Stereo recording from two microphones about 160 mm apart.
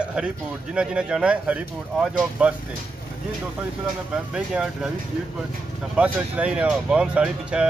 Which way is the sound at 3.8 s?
5° right (ahead or behind).